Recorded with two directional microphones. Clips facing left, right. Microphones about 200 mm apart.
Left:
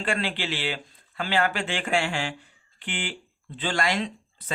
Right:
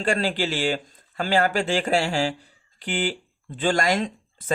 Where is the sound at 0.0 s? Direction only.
40° right (ahead or behind).